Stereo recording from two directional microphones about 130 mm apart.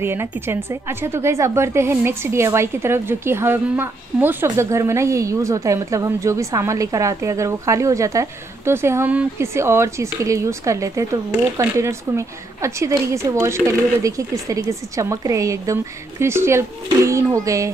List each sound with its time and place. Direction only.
0.0 s a woman's voice: 15° right (ahead or behind)